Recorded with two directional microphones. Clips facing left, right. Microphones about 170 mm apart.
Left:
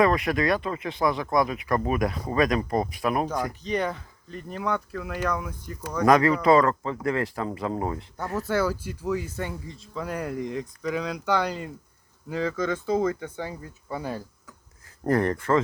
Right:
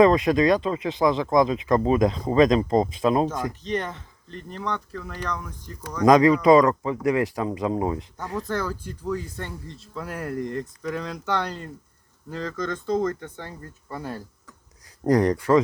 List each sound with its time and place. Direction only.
0.0 s speech: 20° right (ahead or behind)
3.5 s speech: centre (ahead or behind)
6.1 s speech: 15° right (ahead or behind)
8.4 s speech: 5° left (ahead or behind)
15.0 s speech: 15° right (ahead or behind)